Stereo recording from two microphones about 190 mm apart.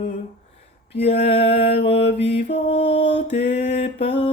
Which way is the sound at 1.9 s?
30° left (ahead or behind).